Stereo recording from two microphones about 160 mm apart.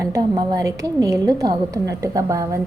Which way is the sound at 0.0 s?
25° right (ahead or behind).